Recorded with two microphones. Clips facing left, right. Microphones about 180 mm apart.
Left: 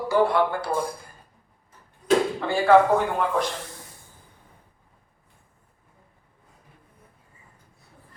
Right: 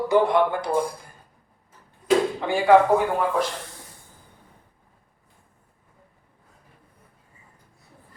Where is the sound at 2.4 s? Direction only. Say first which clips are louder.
Even; 15° right (ahead or behind).